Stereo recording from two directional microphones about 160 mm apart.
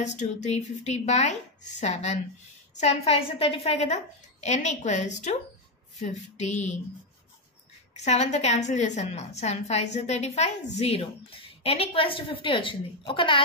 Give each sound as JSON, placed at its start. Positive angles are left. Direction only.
{"t": 0.0, "sound": "a woman's voice", "side_deg": 50}
{"t": 8.0, "sound": "a woman's voice", "side_deg": 45}